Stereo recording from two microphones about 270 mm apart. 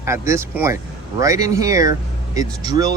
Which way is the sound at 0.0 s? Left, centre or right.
Centre.